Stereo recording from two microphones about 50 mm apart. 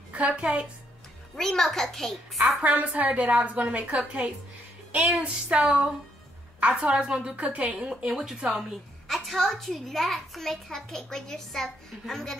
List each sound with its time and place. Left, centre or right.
0.1 s a woman's voice: right
1.3 s a child's voice: centre
2.4 s a woman's voice: right; by 8.4 s centre
9.0 s a child's voice: centre